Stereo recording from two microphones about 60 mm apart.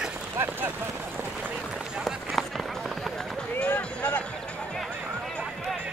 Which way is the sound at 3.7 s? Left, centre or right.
Left.